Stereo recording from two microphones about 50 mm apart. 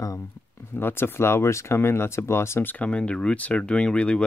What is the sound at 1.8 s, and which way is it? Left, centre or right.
Speech, left.